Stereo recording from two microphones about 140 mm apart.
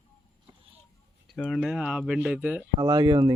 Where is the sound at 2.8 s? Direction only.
30° right (ahead or behind).